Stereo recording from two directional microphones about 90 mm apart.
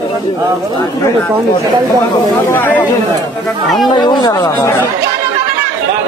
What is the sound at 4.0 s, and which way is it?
Speech, 55° left (ahead or behind).